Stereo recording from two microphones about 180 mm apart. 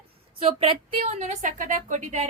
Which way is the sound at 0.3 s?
30° right (ahead or behind).